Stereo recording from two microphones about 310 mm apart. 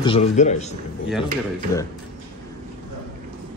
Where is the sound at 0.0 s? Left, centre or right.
Centre.